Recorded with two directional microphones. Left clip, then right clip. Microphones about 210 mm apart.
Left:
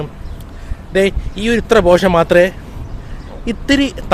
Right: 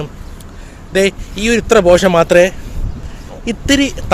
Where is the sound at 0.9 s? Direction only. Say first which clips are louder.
Right 1 dB; 5° right (ahead or behind).